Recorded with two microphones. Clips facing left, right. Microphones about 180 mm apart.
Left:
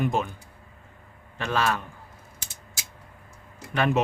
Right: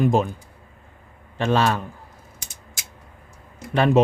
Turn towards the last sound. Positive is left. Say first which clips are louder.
# right 6 dB
turn(degrees=-35)  # may be behind; listen again after turning